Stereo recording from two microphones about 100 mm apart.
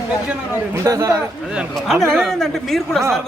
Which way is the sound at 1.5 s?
Centre (ahead or behind).